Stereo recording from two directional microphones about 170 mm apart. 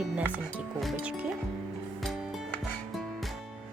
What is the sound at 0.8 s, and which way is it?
Speech, 5° right (ahead or behind).